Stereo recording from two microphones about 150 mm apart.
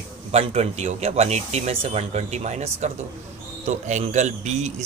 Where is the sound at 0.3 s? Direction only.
45° right (ahead or behind).